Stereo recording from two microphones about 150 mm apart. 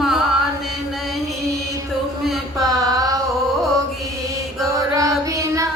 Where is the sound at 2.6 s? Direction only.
25° right (ahead or behind).